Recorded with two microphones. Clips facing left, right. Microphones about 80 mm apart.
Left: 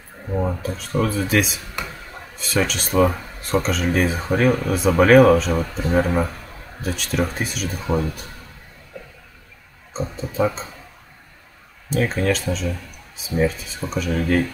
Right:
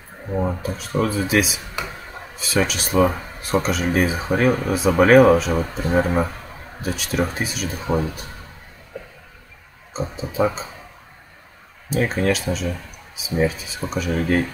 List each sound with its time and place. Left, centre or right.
0.3 s speech: centre
5.6 s speech: right
5.9 s speech: centre
9.9 s speech: centre
12.1 s speech: centre
14.1 s speech: right